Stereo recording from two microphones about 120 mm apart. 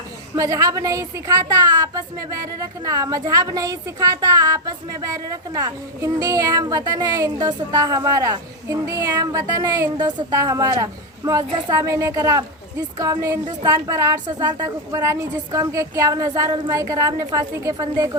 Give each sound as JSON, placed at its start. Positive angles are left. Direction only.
{"t": 0.3, "sound": "speech", "side_deg": -25}